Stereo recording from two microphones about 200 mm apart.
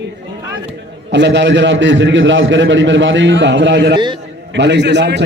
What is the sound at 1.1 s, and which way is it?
A man's voice, 60° right (ahead or behind).